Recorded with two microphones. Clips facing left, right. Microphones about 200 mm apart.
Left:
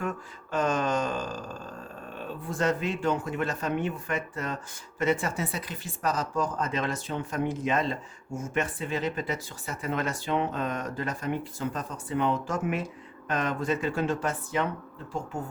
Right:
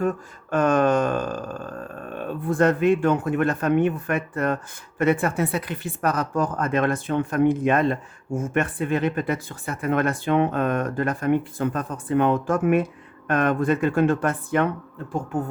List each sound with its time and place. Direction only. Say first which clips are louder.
0.5 s speech: right 8 dB; 55° right (ahead or behind)